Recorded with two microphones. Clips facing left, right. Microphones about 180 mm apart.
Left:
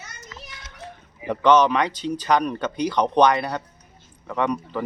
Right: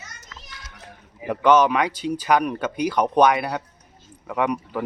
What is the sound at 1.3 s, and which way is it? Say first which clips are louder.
Speech: even; 10° right (ahead or behind).